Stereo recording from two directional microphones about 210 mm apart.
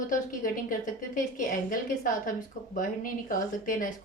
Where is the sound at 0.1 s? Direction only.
40° left (ahead or behind).